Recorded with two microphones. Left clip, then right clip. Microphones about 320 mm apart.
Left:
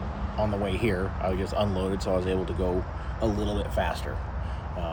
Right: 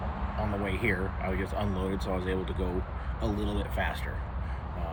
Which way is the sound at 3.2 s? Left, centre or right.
Left.